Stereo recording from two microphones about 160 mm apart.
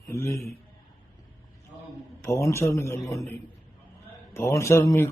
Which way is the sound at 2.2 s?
20° left (ahead or behind).